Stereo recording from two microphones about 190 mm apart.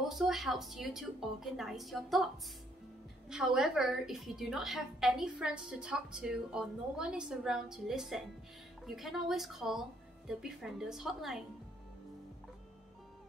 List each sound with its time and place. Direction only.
0.1 s a woman's voice: centre (ahead or behind)
3.3 s a woman's voice: 5° right (ahead or behind)